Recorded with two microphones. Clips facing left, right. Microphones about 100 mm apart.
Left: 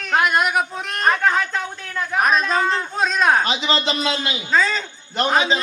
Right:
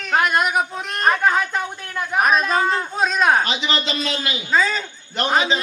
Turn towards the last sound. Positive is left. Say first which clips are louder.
# left 1 dB
turn(degrees=-5)  # may be behind; listen again after turning